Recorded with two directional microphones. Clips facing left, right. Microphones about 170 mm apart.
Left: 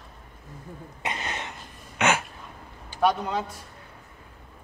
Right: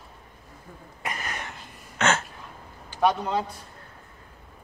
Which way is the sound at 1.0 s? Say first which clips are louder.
Left 1 dB; 25° left (ahead or behind).